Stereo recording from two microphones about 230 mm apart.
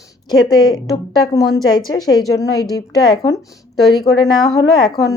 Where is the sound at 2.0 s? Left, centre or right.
Centre.